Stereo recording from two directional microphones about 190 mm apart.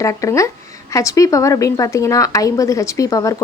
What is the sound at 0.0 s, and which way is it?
A woman's voice, 15° left (ahead or behind).